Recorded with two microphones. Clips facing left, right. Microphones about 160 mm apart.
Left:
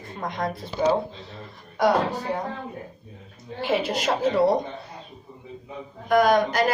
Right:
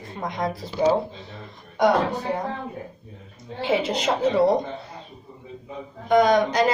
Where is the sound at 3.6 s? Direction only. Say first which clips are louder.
Right 1 dB; 20° right (ahead or behind).